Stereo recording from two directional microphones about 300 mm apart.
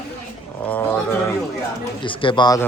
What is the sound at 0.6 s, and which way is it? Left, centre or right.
Speech, centre.